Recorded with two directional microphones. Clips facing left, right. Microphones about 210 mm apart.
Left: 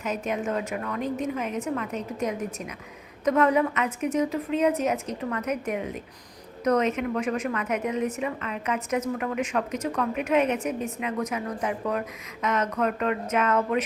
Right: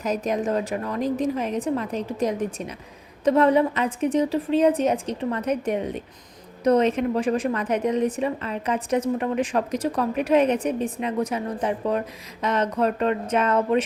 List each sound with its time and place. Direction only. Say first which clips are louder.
0.0 s a woman's voice: right 4 dB; 35° right (ahead or behind)